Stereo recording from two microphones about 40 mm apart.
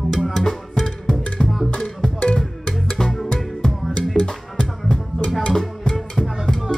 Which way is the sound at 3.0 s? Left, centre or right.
Centre.